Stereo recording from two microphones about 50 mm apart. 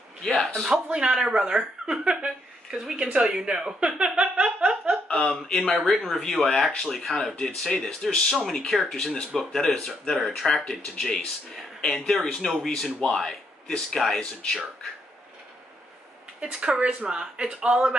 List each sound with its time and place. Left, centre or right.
0.2 s a sound: centre
0.8 s speech: centre
5.0 s speech: centre
16.3 s speech: centre